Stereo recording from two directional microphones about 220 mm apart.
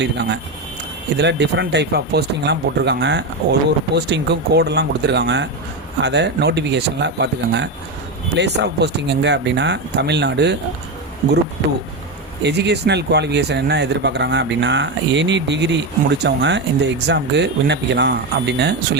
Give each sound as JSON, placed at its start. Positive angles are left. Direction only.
{"t": 0.0, "sound": "speech", "side_deg": -50}
{"t": 12.4, "sound": "speech", "side_deg": -50}